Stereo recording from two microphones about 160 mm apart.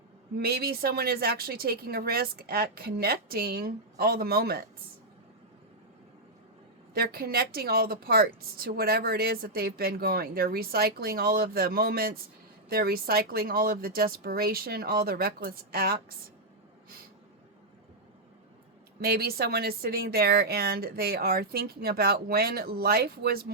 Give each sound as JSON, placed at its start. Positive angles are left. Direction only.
{"t": 0.3, "sound": "a woman's voice", "side_deg": -85}
{"t": 6.9, "sound": "a woman's voice", "side_deg": -70}
{"t": 18.9, "sound": "a woman's voice", "side_deg": -70}